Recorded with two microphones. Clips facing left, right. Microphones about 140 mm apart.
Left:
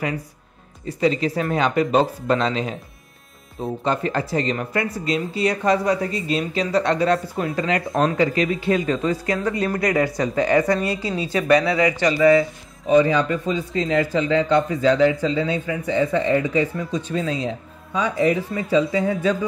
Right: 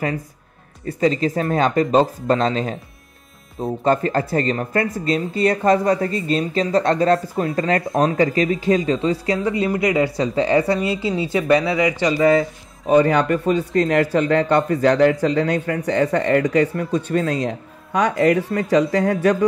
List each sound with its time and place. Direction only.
0.8 s speech: 45° right (ahead or behind)
3.8 s speech: 45° right (ahead or behind); by 12.1 s 20° right (ahead or behind)
12.8 s speech: 50° right (ahead or behind); by 19.3 s 70° right (ahead or behind)